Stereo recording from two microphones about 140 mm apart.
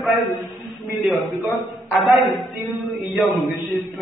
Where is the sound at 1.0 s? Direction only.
Centre (ahead or behind).